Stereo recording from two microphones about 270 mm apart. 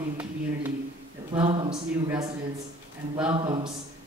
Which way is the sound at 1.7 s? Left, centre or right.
Centre.